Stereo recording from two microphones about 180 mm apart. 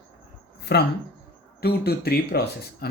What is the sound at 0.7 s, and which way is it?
Speech, 65° left (ahead or behind).